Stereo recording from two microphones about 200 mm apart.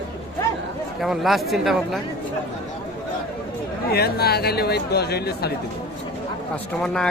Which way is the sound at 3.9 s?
50° left (ahead or behind).